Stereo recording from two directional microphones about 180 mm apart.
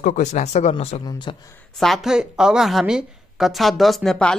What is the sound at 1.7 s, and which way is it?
A woman's voice, centre (ahead or behind).